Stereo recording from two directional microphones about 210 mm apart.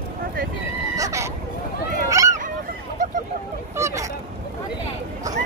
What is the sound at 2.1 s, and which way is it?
Honk, 15° right (ahead or behind).